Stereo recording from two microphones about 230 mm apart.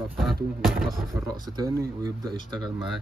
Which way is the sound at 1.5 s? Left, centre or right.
Centre.